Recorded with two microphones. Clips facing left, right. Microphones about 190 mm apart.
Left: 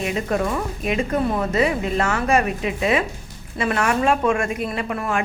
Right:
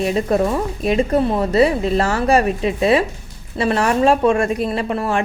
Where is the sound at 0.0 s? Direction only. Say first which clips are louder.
Right 5 dB; 35° right (ahead or behind).